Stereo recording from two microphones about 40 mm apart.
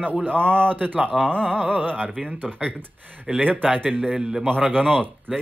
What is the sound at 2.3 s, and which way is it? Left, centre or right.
Speech, right.